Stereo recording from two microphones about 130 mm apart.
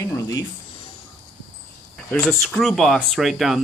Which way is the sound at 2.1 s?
5° left (ahead or behind).